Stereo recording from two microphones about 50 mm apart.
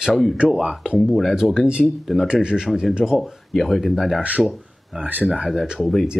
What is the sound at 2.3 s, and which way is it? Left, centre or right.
Speech, centre.